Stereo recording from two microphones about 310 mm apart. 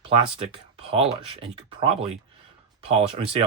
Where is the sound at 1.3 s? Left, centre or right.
Centre.